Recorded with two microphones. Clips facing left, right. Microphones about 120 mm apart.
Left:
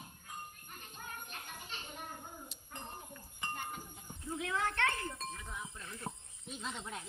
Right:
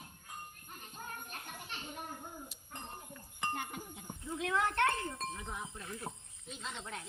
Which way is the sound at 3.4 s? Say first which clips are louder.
Right 3 dB; 65° right (ahead or behind).